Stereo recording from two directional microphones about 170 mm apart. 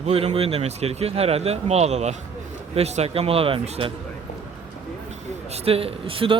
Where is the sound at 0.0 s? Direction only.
40° right (ahead or behind).